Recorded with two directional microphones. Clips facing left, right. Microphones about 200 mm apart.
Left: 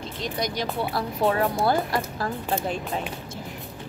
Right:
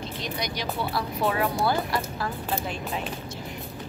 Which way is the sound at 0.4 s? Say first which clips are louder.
Left 4 dB; 50° left (ahead or behind).